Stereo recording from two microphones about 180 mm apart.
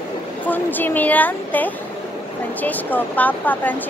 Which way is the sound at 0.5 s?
10° left (ahead or behind).